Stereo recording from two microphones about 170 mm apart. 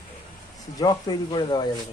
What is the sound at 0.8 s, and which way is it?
Speech, 25° left (ahead or behind).